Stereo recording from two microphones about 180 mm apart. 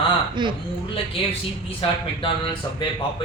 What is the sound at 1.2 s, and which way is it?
Speech, 30° left (ahead or behind).